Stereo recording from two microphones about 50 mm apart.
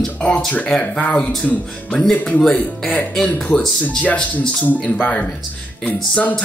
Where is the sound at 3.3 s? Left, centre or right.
Left.